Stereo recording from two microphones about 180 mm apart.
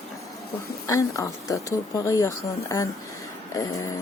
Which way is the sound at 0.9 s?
15° left (ahead or behind).